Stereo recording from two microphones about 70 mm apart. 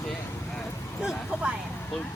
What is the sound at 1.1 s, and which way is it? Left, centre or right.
Vehicle, centre.